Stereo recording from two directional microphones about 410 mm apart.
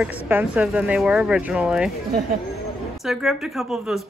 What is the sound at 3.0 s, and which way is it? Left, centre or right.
Speech, centre.